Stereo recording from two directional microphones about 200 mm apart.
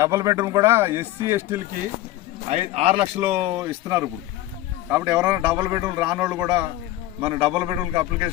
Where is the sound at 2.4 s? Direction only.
30° right (ahead or behind).